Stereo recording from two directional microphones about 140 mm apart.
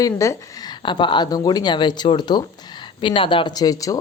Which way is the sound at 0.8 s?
35° left (ahead or behind).